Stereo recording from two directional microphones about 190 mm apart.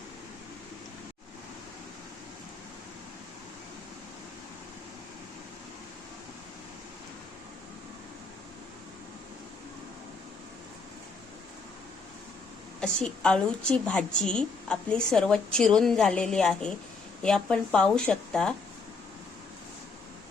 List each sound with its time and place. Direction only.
12.8 s a woman's voice: 5° left (ahead or behind)